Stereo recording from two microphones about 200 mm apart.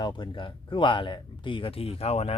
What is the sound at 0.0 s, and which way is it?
Speech, 20° left (ahead or behind).